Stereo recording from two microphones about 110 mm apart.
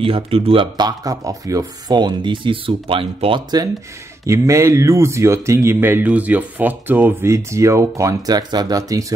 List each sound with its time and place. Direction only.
0.0 s speech: 55° right (ahead or behind)
0.7 s speech: 35° right (ahead or behind); by 3.4 s 55° right (ahead or behind)
4.3 s speech: 25° right (ahead or behind)